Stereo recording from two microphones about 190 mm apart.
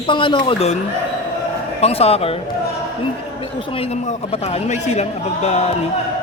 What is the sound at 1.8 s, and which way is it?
Speech, 30° left (ahead or behind).